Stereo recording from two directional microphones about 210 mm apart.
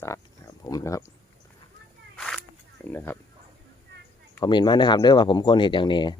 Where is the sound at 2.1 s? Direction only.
5° left (ahead or behind).